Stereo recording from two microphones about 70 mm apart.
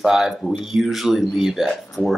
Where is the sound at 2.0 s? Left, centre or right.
Left.